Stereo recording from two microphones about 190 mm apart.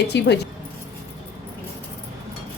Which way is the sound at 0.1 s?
65° left (ahead or behind).